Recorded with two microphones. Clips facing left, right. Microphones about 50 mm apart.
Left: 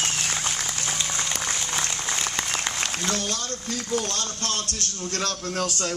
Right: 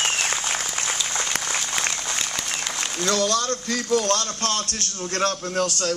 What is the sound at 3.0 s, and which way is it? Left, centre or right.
A man's voice, right.